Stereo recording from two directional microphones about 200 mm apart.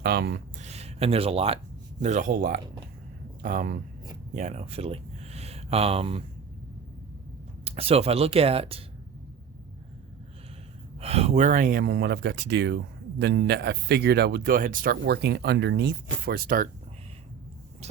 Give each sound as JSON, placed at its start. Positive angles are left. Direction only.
{"t": 0.0, "sound": "speech", "side_deg": -50}
{"t": 0.6, "sound": "speech", "side_deg": -30}
{"t": 7.6, "sound": "speech", "side_deg": -30}
{"t": 11.0, "sound": "speech", "side_deg": -30}